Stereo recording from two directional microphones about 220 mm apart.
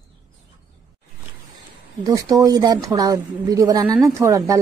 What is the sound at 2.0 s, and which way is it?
Speech, 15° right (ahead or behind).